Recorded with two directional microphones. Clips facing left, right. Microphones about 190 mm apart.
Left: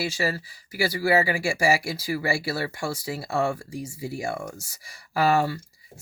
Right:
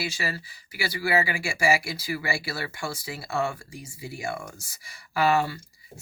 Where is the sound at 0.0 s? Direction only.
40° left (ahead or behind).